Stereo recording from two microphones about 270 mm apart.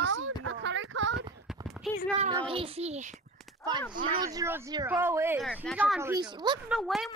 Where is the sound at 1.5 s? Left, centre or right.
Centre.